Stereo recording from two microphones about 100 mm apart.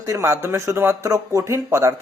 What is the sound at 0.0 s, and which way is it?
Speech, 30° right (ahead or behind).